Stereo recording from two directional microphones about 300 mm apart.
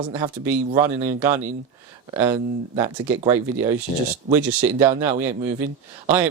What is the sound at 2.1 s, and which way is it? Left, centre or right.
Speech, centre.